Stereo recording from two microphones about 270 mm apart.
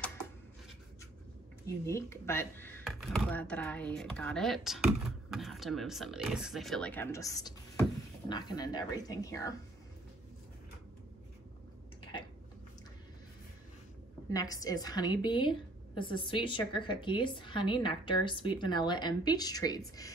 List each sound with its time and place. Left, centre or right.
1.9 s a woman's voice: centre
12.0 s a sound: centre
14.3 s a woman's voice: centre